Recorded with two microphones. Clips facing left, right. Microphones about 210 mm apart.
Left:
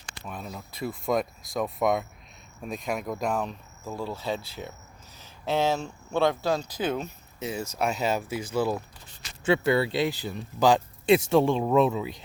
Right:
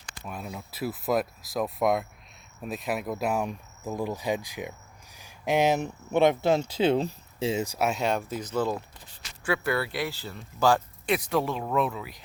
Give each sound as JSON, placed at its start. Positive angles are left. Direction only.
{"t": 0.3, "sound": "speech", "side_deg": -5}
{"t": 7.6, "sound": "speech", "side_deg": -10}
{"t": 7.9, "sound": "speech", "side_deg": 0}
{"t": 9.4, "sound": "speech", "side_deg": 25}